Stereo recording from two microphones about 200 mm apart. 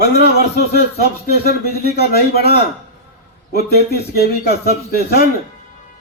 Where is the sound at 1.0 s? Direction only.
50° left (ahead or behind).